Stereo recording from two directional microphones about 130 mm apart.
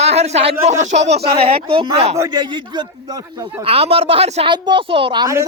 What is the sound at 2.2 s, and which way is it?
A man's voice, 30° right (ahead or behind).